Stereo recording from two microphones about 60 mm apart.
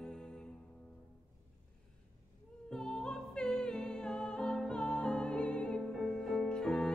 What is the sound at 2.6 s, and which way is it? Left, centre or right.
Music, centre.